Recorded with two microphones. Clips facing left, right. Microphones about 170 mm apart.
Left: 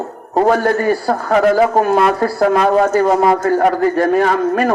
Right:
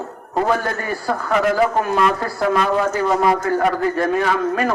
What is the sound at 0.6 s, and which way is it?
Speech, 60° left (ahead or behind).